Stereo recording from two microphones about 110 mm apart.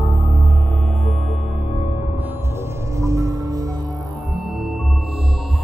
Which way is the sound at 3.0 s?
30° right (ahead or behind).